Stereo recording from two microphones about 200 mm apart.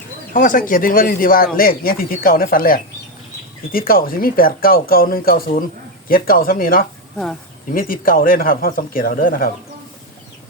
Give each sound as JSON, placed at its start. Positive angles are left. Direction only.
{"t": 0.3, "sound": "speech", "side_deg": 40}